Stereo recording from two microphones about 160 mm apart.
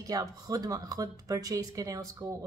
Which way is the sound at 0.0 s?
20° right (ahead or behind).